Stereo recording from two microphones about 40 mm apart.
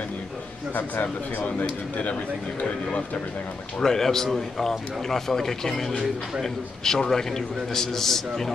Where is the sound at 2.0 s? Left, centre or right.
Left.